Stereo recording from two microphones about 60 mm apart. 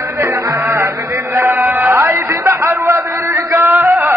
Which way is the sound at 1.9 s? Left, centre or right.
Right.